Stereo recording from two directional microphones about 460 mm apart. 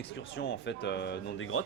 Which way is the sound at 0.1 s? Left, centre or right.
Left.